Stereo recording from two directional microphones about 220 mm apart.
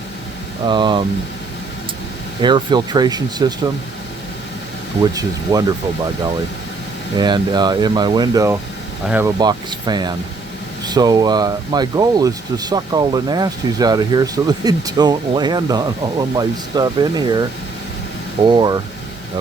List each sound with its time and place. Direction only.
0.7 s speech: 20° right (ahead or behind)
2.4 s speech: 20° right (ahead or behind)
5.1 s speech: 15° right (ahead or behind)
7.2 s speech: 20° right (ahead or behind)
9.4 s speech: 20° right (ahead or behind)
18.4 s speech: 20° right (ahead or behind)